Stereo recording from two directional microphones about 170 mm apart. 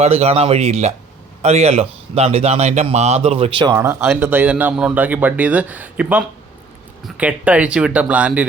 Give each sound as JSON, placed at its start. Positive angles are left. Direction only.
{"t": 0.0, "sound": "speech", "side_deg": -40}
{"t": 3.8, "sound": "speech", "side_deg": -15}